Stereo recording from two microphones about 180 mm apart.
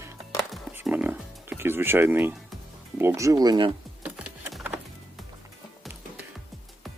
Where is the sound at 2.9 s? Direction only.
10° right (ahead or behind).